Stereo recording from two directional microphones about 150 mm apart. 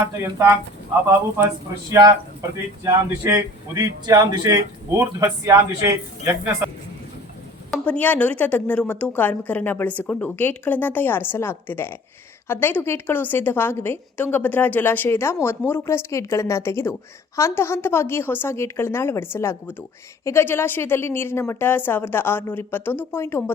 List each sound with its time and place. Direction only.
0.0 s a man's voice: 20° right (ahead or behind)
1.9 s a man's voice: 25° right (ahead or behind)
7.9 s a woman's voice: 10° left (ahead or behind)